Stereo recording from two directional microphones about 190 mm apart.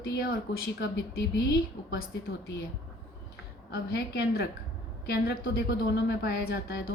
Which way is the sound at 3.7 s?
60° left (ahead or behind).